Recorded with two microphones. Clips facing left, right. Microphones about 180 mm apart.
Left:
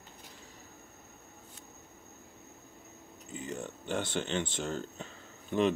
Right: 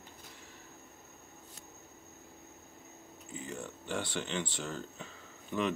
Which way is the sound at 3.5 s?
25° left (ahead or behind).